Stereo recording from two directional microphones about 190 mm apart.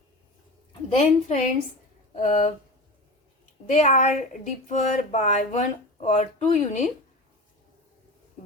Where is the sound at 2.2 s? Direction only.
40° left (ahead or behind).